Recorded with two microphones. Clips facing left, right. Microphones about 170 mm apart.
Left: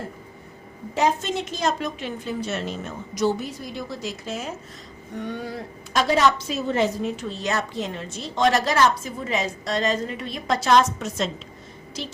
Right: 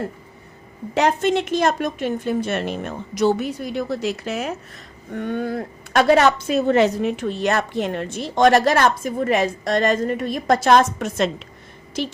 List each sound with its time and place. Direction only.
0.9 s a woman's voice: 65° right (ahead or behind)
5.1 s a woman's voice: 55° right (ahead or behind)